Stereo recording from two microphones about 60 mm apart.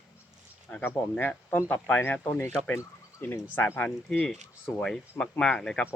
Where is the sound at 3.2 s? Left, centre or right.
Left.